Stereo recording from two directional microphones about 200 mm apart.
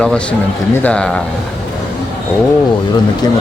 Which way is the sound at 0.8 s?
5° left (ahead or behind).